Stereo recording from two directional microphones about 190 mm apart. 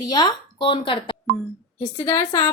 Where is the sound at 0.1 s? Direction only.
25° left (ahead or behind).